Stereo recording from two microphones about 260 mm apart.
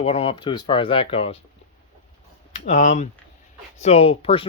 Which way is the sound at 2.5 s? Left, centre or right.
Left.